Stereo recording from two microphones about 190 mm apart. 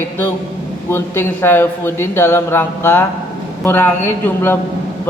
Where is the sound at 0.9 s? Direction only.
15° left (ahead or behind).